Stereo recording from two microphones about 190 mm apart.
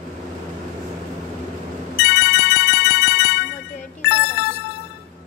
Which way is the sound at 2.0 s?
60° left (ahead or behind).